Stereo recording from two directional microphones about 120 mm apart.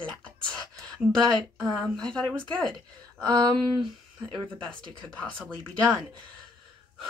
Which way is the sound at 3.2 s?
35° right (ahead or behind).